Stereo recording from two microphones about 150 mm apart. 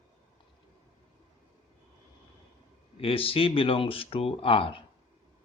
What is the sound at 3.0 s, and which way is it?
Speech, 40° left (ahead or behind).